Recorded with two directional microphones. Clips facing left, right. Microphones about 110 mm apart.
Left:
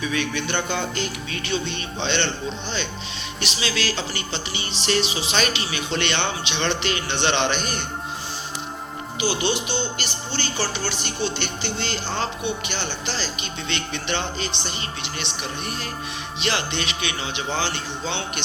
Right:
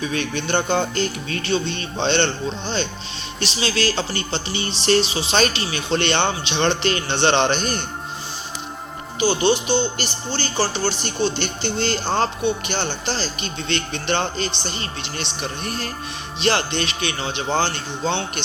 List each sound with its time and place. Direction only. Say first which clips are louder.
0.0 s speech: right 1 dB; 35° right (ahead or behind)
9.2 s speech: right 6 dB; 35° right (ahead or behind)